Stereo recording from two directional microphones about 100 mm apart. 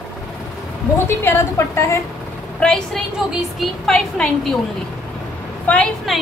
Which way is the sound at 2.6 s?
5° left (ahead or behind).